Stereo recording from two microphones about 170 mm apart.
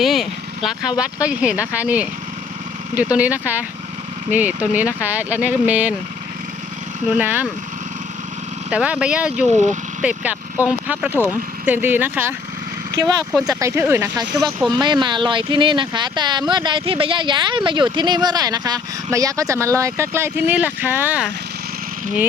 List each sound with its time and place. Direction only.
0.0 s speech: centre (ahead or behind)
7.1 s speech: 10° right (ahead or behind)
8.7 s speech: 5° right (ahead or behind)
9.5 s speech: 45° right (ahead or behind)
10.0 s speech: 5° right (ahead or behind)
13.5 s speech: 15° right (ahead or behind)